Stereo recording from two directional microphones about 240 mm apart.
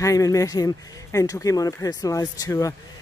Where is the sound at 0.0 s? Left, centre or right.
Centre.